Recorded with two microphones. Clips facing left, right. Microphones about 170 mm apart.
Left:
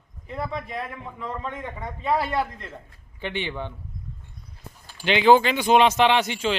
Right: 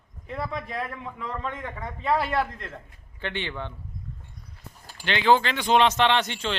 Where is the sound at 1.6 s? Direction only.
20° left (ahead or behind).